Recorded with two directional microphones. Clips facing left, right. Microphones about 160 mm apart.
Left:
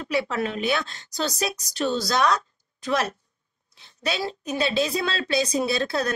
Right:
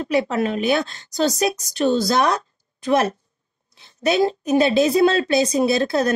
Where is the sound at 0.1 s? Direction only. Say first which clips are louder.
Right 5 dB; 45° right (ahead or behind).